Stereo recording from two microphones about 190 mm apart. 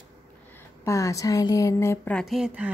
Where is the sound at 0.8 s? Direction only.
15° left (ahead or behind); by 2.7 s 5° right (ahead or behind).